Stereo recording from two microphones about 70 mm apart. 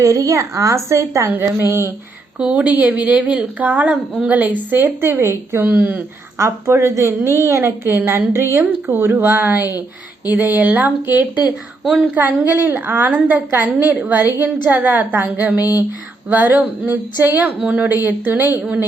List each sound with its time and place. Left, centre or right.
0.0 s a woman's voice: right
1.3 s a woman's voice: right
2.4 s a woman's voice: centre; by 5.6 s right
5.6 s a woman's voice: right
6.3 s a woman's voice: right
7.9 s a woman's voice: right